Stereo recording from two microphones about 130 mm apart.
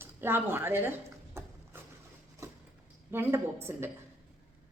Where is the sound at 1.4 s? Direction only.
20° right (ahead or behind).